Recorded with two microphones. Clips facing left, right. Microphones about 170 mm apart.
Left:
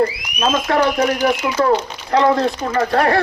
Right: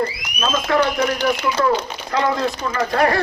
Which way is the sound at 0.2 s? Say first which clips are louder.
Left 4 dB; 30° left (ahead or behind).